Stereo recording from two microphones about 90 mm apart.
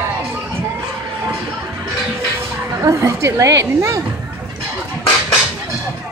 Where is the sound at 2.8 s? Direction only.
35° right (ahead or behind).